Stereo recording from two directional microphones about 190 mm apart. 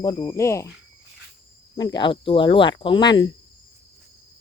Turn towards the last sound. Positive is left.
turn(degrees=25)  # may be behind; listen again after turning